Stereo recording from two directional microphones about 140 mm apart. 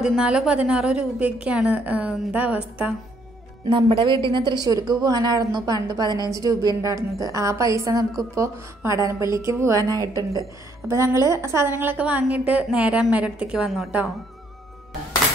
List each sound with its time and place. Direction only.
0.0 s a woman's voice: 5° right (ahead or behind)
3.6 s a woman's voice: 35° right (ahead or behind); by 14.1 s centre (ahead or behind)